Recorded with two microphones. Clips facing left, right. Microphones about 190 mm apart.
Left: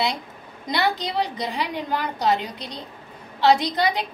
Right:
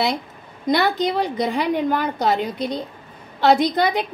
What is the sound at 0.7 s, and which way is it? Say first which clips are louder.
A woman's voice: right 5 dB; 50° right (ahead or behind).